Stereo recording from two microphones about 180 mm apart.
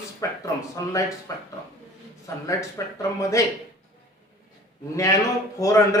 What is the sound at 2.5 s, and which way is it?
Speech, 15° left (ahead or behind).